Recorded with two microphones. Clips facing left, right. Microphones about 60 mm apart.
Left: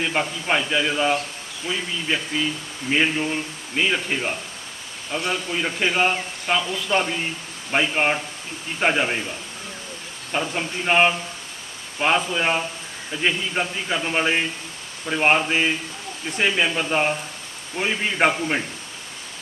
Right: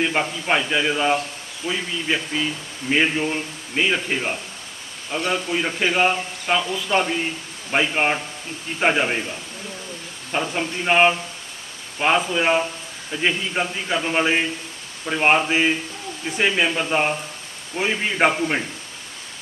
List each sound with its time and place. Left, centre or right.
0.0 s a man's voice: centre
10.3 s a man's voice: centre